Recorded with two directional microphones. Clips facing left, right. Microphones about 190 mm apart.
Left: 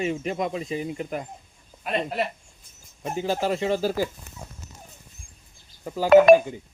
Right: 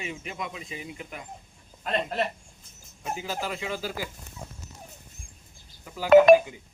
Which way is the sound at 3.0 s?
40° left (ahead or behind).